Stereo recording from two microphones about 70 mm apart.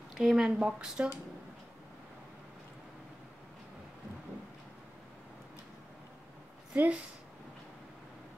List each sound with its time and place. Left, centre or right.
0.2 s speech: centre
6.7 s speech: right